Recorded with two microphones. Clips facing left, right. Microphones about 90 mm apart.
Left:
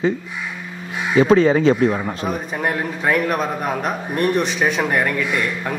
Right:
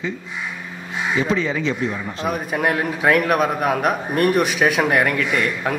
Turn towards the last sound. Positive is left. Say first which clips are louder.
# right 1 dB
turn(degrees=5)  # may be behind; listen again after turning